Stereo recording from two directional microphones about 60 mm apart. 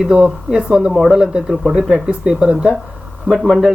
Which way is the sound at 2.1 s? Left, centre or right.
Centre.